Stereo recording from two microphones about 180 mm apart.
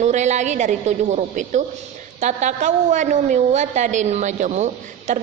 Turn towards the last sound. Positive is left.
turn(degrees=-45)  # may be behind; listen again after turning